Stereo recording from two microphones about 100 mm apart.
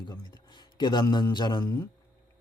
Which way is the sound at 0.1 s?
45° left (ahead or behind).